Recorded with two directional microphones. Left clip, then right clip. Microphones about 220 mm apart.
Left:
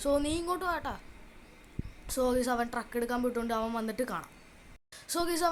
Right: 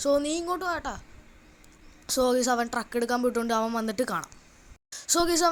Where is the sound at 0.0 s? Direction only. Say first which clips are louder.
Right 4 dB; 15° right (ahead or behind).